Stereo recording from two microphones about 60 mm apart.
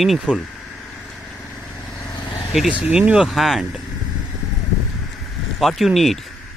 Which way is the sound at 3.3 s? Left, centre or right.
Centre.